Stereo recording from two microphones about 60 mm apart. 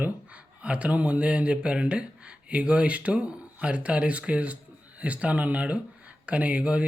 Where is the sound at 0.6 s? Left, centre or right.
Right.